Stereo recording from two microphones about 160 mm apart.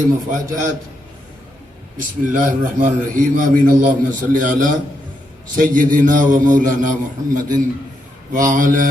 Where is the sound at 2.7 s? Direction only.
55° right (ahead or behind).